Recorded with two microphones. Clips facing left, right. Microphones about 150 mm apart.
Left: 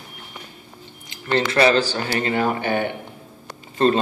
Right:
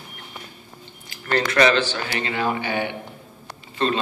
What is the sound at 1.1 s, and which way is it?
A man's voice, 25° left (ahead or behind).